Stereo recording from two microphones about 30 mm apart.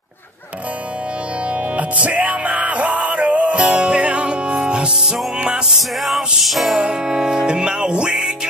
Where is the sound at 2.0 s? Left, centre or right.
Right.